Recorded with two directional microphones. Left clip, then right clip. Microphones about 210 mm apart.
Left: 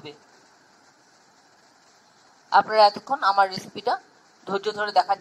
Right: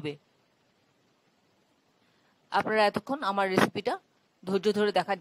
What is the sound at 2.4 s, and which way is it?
Speech, 45° right (ahead or behind).